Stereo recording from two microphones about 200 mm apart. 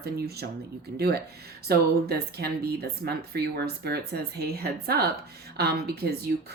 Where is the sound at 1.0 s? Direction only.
50° right (ahead or behind).